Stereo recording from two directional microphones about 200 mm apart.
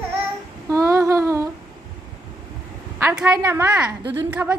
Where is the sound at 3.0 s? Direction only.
5° right (ahead or behind).